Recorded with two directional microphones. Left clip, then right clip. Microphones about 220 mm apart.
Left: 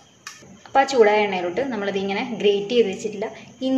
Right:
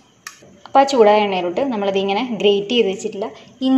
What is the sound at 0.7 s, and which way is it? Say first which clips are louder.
A woman's voice: right 4 dB; 20° right (ahead or behind).